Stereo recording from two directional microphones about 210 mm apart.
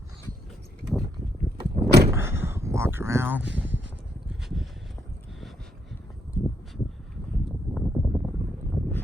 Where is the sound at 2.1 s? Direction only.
10° right (ahead or behind).